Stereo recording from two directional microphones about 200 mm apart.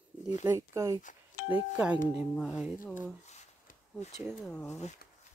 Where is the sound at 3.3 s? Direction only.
35° left (ahead or behind).